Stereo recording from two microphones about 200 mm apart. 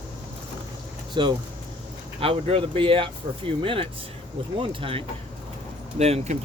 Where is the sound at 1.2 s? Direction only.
25° right (ahead or behind).